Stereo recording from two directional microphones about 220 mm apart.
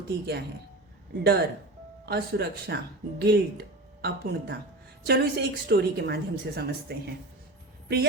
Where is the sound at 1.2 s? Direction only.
50° right (ahead or behind).